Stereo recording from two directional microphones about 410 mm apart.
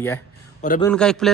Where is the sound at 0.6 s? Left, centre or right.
Centre.